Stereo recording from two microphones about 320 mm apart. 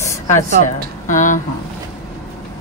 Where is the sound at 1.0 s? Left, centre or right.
Left.